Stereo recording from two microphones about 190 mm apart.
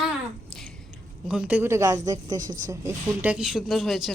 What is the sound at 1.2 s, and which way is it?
Speech, 5° right (ahead or behind).